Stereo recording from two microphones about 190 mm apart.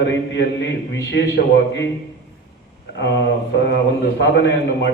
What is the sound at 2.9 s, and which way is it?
Mantra, 65° left (ahead or behind).